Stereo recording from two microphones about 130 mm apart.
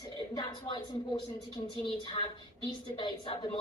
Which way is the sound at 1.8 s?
40° left (ahead or behind).